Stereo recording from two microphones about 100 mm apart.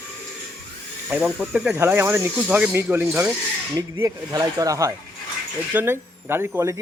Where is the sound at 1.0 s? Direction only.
10° right (ahead or behind).